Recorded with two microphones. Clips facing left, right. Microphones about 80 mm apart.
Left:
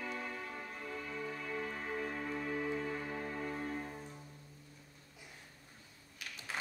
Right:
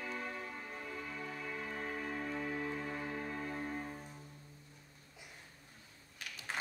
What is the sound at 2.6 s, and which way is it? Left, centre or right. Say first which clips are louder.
Music: left 2 dB; centre.